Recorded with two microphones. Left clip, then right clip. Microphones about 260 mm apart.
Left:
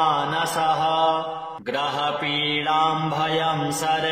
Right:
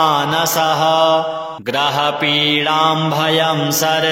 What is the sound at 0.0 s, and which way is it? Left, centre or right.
Mantra, right.